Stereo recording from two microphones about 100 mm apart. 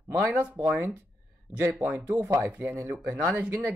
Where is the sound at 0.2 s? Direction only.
25° right (ahead or behind).